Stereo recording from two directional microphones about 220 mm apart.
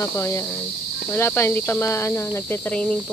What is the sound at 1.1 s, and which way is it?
Speech, 10° left (ahead or behind).